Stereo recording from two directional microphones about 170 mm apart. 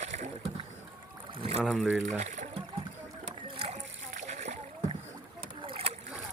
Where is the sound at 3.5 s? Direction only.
40° right (ahead or behind).